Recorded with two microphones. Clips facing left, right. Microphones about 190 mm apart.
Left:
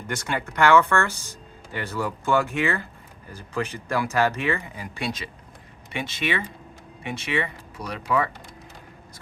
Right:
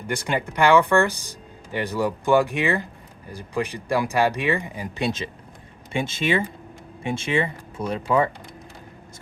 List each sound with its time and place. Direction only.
0.1 s speech: 15° right (ahead or behind)